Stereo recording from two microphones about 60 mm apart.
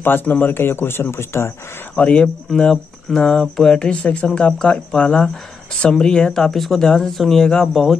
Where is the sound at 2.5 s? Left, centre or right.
Centre.